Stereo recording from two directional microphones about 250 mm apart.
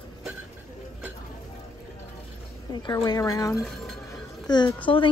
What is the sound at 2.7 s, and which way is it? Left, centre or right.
Speech, centre.